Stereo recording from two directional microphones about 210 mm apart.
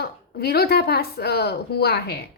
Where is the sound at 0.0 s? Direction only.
50° left (ahead or behind).